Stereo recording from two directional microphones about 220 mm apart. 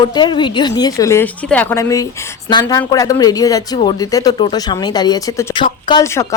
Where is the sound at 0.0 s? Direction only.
20° left (ahead or behind).